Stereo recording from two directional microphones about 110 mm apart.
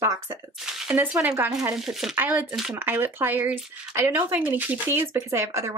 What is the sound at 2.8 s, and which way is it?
Speech, 20° right (ahead or behind).